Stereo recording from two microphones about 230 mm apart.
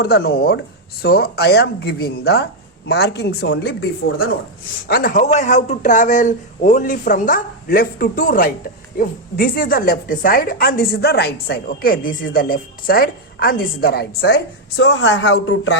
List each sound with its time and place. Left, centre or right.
0.0 s a woman's voice: left
4.9 s a man's voice: left